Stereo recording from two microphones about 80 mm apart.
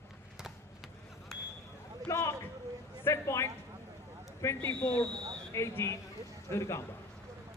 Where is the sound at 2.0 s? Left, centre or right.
Left.